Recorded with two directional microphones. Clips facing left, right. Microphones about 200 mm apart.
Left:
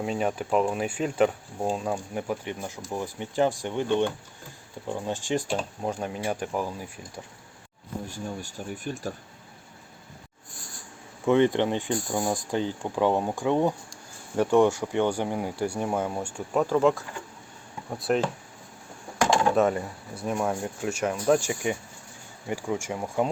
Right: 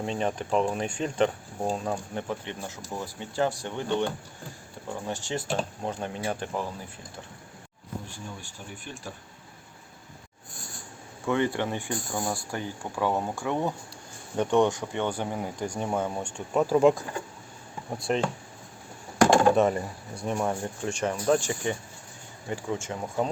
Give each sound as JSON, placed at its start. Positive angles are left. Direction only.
{"t": 0.0, "sound": "speech", "side_deg": 5}
{"t": 8.0, "sound": "speech", "side_deg": 40}
{"t": 11.3, "sound": "speech", "side_deg": 20}
{"t": 14.3, "sound": "speech", "side_deg": 5}
{"t": 16.6, "sound": "speech", "side_deg": -15}
{"t": 17.9, "sound": "speech", "side_deg": 5}
{"t": 19.2, "sound": "a sound", "side_deg": -50}
{"t": 19.5, "sound": "speech", "side_deg": 0}